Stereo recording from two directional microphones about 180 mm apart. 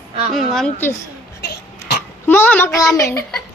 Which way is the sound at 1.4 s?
65° left (ahead or behind).